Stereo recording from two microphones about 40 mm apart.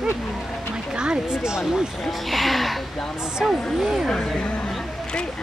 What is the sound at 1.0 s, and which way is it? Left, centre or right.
Speech, right.